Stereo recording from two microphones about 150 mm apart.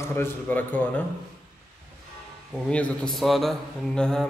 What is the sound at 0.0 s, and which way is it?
A man's voice, 15° left (ahead or behind).